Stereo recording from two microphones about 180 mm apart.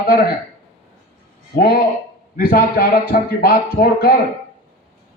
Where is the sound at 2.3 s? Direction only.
55° left (ahead or behind).